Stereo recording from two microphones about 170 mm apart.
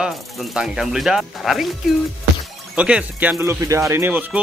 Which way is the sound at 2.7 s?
5° right (ahead or behind).